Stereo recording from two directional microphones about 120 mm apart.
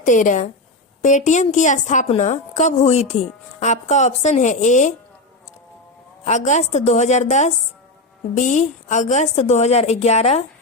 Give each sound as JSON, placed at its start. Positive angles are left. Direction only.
{"t": 0.0, "sound": "a woman's voice", "side_deg": 90}
{"t": 2.0, "sound": "a woman's voice", "side_deg": 70}
{"t": 6.2, "sound": "a woman's voice", "side_deg": 75}
{"t": 8.4, "sound": "a woman's voice", "side_deg": 90}